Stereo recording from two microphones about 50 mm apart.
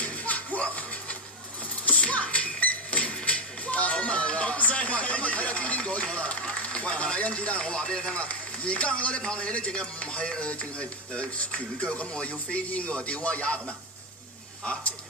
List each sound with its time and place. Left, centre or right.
0.0 s music: left
6.7 s speech: left
14.6 s speech: left